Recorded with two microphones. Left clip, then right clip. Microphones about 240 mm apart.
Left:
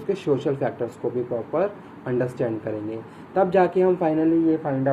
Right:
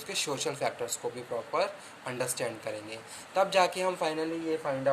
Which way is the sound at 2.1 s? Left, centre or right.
Right.